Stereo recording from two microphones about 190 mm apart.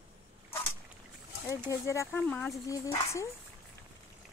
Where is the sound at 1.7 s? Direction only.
15° left (ahead or behind).